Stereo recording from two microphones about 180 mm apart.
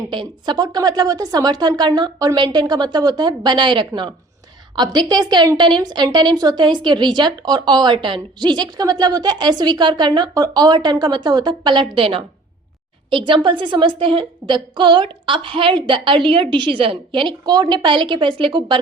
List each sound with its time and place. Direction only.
0.1 s a woman's voice: 25° right (ahead or behind)